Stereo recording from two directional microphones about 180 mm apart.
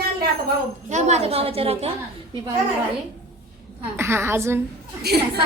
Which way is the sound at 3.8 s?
15° right (ahead or behind).